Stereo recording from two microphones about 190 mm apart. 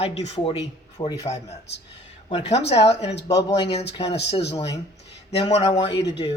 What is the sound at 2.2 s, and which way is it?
Speech, 30° left (ahead or behind).